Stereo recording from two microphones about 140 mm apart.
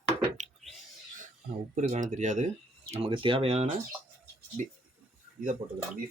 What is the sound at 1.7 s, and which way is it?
Speech, 60° right (ahead or behind).